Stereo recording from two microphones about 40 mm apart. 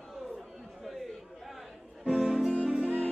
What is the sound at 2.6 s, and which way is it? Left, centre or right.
Music, right.